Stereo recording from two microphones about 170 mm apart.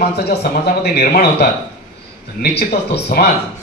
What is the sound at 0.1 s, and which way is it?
Speech, 70° left (ahead or behind).